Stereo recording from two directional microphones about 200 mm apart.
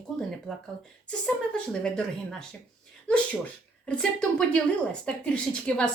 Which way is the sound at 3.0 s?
5° left (ahead or behind).